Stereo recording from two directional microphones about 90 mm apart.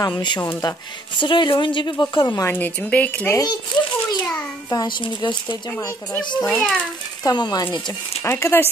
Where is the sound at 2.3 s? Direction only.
30° left (ahead or behind).